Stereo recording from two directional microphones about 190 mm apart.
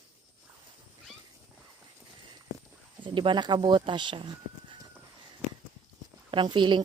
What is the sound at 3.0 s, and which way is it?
Speech, 25° right (ahead or behind).